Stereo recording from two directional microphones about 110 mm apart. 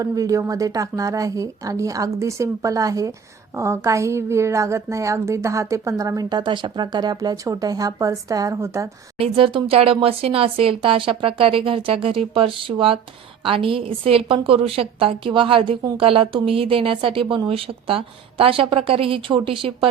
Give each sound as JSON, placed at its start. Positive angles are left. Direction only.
{"t": 0.0, "sound": "a woman's voice", "side_deg": -30}
{"t": 9.1, "sound": "a woman's voice", "side_deg": -55}